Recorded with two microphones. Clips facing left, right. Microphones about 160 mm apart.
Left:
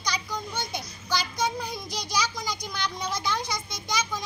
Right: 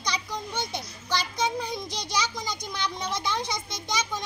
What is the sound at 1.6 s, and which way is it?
A child's voice, 5° left (ahead or behind).